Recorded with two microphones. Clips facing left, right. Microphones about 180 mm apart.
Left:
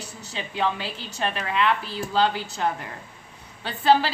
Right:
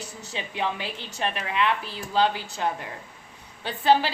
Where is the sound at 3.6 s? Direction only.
15° right (ahead or behind).